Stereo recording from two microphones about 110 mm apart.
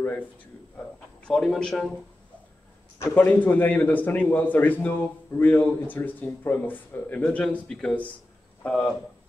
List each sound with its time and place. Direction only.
0.7 s a man's voice: 5° left (ahead or behind)
3.0 s a man's voice: 20° left (ahead or behind)